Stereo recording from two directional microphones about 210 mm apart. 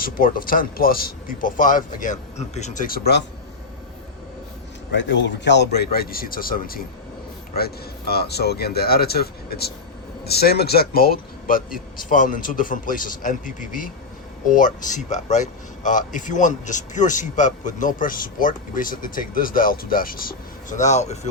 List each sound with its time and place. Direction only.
0.0 s speech: 40° left (ahead or behind)
4.9 s speech: 60° left (ahead or behind); by 21.2 s 35° left (ahead or behind)